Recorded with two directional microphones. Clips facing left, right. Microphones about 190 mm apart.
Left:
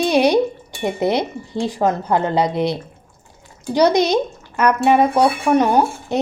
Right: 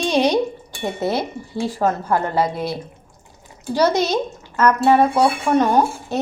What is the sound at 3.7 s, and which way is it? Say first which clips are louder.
Speech: left 3 dB; 15° left (ahead or behind).